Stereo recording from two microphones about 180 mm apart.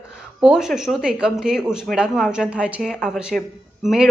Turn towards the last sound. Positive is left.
turn(degrees=0)  # may be behind; listen again after turning